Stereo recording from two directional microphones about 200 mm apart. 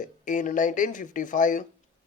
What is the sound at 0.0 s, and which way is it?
Speech, 40° left (ahead or behind).